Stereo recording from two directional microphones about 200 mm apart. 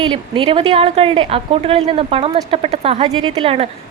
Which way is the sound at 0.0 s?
25° right (ahead or behind).